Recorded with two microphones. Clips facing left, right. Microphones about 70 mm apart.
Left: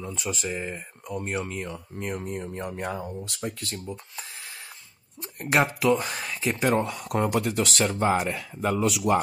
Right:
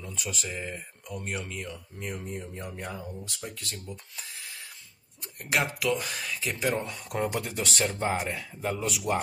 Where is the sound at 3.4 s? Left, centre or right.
Left.